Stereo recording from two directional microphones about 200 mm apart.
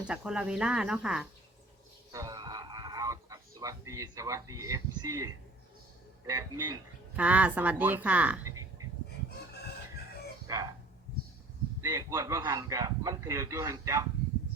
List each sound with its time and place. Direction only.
0.1 s speech: 5° right (ahead or behind)
2.1 s a sound: 15° right (ahead or behind)
6.2 s speech: 15° right (ahead or behind)
10.4 s chicken: 15° right (ahead or behind)
11.8 s speech: 15° right (ahead or behind)